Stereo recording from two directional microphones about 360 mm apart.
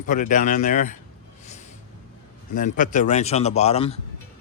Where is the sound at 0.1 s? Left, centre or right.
Left.